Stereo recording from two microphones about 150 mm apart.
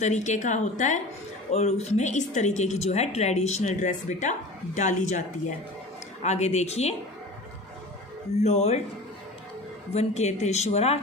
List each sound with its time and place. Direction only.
0.0 s speech: 50° left (ahead or behind)
8.4 s speech: 45° left (ahead or behind)
9.9 s speech: 45° left (ahead or behind)